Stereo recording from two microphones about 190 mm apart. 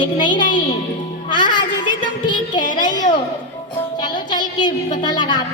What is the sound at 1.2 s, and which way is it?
Child singing, 25° left (ahead or behind).